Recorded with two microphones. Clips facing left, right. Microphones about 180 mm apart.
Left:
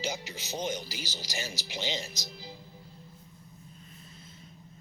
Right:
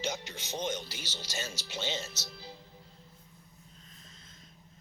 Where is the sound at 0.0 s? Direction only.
10° left (ahead or behind).